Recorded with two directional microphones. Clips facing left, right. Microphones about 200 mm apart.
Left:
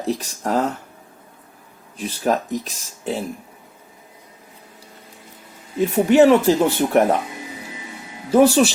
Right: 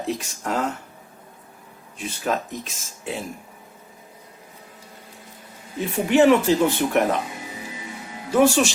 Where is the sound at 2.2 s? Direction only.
40° left (ahead or behind).